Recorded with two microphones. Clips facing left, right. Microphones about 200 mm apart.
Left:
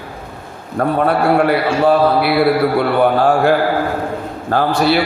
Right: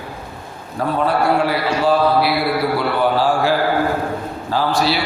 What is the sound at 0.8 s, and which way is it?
A man's voice, 55° left (ahead or behind).